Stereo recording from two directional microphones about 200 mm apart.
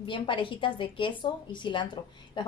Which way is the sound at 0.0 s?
25° left (ahead or behind).